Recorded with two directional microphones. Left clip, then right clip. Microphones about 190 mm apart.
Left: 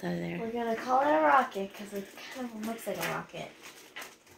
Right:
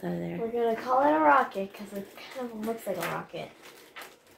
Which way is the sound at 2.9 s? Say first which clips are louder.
Right 2 dB; 10° right (ahead or behind).